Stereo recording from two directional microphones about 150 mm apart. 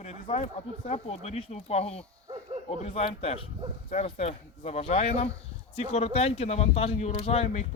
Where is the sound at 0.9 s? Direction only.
45° left (ahead or behind).